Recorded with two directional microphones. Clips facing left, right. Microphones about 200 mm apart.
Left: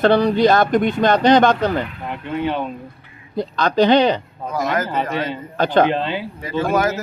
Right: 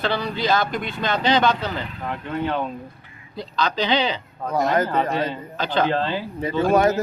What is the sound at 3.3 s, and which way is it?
Speech, 55° left (ahead or behind).